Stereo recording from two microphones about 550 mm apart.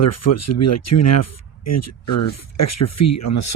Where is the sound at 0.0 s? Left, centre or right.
Left.